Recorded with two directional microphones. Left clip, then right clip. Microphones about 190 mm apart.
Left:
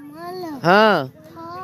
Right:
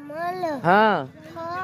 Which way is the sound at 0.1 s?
55° right (ahead or behind).